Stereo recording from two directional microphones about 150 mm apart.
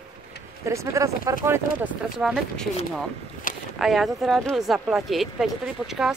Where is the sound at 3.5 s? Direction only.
60° left (ahead or behind).